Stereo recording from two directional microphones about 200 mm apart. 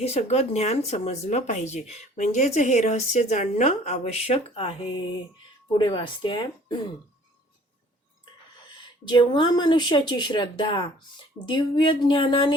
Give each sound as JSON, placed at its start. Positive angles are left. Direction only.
{"t": 0.0, "sound": "speech", "side_deg": 35}
{"t": 9.0, "sound": "speech", "side_deg": 20}